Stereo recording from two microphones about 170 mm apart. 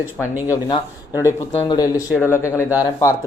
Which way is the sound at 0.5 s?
20° left (ahead or behind).